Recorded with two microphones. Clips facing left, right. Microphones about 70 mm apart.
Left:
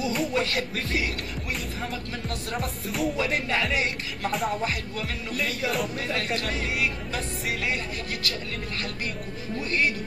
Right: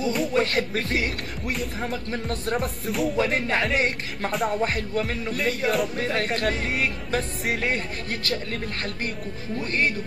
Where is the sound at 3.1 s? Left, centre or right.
Right.